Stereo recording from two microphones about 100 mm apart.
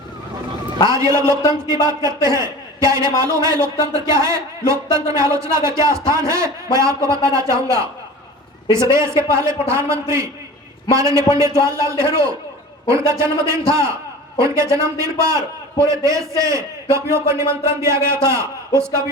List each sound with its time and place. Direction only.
0.9 s a man's voice: 35° right (ahead or behind)